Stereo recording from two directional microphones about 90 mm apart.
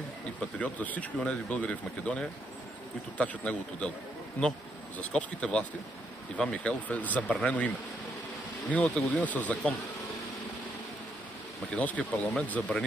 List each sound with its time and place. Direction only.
0.6 s speech: 15° left (ahead or behind)
8.8 s speech: 15° left (ahead or behind)
11.7 s speech: 15° left (ahead or behind)